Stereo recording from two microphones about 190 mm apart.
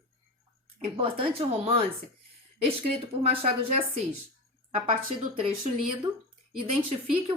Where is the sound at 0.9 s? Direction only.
30° right (ahead or behind).